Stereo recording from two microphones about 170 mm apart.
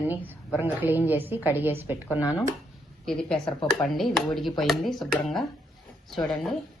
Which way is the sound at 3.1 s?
5° left (ahead or behind).